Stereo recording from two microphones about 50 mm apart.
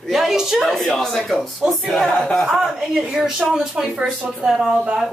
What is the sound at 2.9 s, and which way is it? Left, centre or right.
A woman's voice, centre.